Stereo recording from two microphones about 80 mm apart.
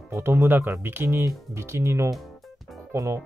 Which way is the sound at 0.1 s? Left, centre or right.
Right.